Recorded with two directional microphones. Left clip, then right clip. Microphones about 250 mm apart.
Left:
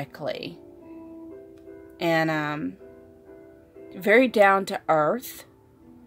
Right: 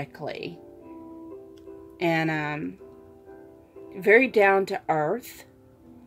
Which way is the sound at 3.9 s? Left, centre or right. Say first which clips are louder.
Even; left.